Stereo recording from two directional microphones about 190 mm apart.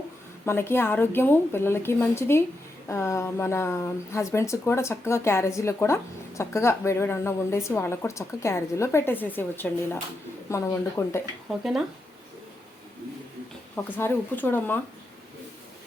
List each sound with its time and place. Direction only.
0.4 s speech: 10° left (ahead or behind)
11.4 s speech: centre (ahead or behind)
13.9 s speech: 10° left (ahead or behind)